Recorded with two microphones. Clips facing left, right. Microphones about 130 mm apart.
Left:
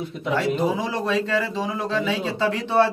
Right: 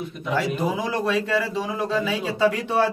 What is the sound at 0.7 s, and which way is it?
A man's voice, 5° right (ahead or behind).